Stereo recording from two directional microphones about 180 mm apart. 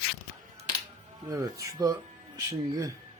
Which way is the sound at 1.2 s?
15° right (ahead or behind).